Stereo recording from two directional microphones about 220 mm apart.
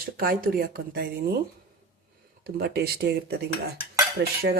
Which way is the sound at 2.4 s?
45° right (ahead or behind).